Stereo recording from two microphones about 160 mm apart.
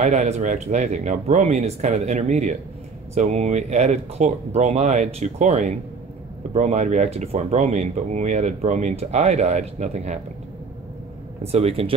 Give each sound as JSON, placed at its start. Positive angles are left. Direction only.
{"t": 0.0, "sound": "speech", "side_deg": -45}
{"t": 11.4, "sound": "speech", "side_deg": -40}